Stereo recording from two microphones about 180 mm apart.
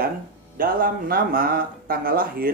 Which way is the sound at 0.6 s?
55° right (ahead or behind).